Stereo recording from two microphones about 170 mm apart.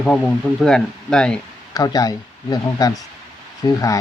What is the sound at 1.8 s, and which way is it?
Speech, 20° left (ahead or behind).